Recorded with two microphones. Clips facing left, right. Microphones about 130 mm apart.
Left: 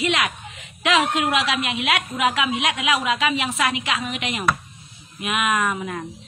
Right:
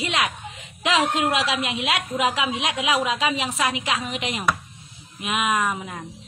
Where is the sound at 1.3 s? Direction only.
30° right (ahead or behind).